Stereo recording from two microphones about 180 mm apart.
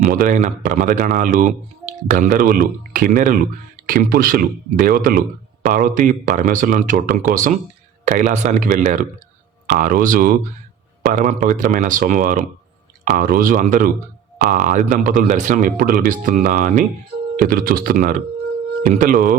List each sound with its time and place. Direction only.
0.0 s speech: 50° right (ahead or behind)